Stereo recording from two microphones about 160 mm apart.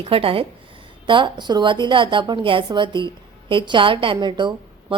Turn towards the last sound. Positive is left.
turn(degrees=-30)  # may be behind; listen again after turning